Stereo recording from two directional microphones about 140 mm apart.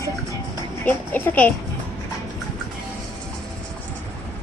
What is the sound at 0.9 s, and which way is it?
Speech, 15° left (ahead or behind).